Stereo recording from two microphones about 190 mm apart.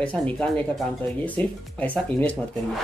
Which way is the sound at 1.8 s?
10° left (ahead or behind).